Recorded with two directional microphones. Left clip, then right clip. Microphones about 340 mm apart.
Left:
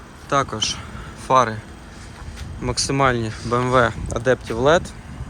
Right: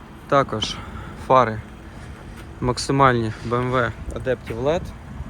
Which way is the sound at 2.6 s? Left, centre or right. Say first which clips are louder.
Right 2 dB; centre.